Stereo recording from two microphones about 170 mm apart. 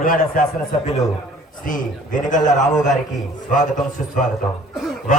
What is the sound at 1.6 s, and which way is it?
Speech, 50° left (ahead or behind).